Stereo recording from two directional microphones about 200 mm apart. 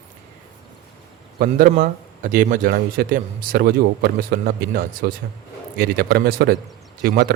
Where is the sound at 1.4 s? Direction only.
45° right (ahead or behind).